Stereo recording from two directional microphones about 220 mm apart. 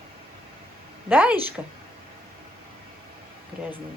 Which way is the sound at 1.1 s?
5° right (ahead or behind).